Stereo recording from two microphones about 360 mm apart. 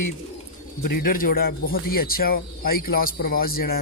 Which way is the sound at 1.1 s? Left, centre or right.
Left.